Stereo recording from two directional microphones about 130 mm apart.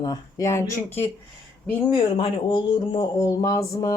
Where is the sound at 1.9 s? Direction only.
35° left (ahead or behind).